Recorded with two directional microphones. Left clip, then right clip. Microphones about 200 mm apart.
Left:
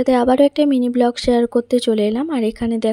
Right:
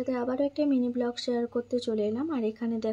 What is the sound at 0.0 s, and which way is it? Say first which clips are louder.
Speech: left 15 dB; 50° left (ahead or behind).